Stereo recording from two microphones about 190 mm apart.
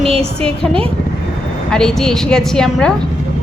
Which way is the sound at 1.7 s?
5° left (ahead or behind).